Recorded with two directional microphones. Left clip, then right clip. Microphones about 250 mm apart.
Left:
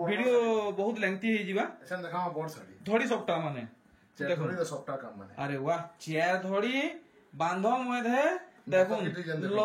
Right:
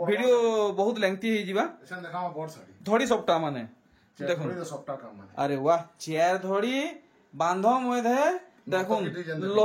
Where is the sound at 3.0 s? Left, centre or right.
Centre.